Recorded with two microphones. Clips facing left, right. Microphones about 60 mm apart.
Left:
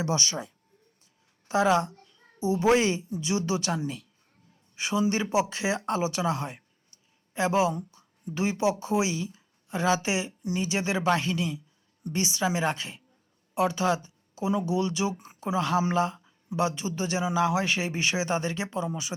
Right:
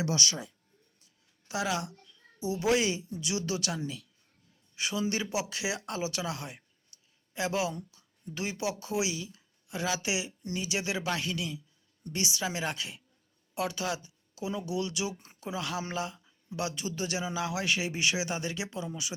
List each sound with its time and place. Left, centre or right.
0.0 s speech: left
2.0 s a sound: left
2.4 s a woman's voice: left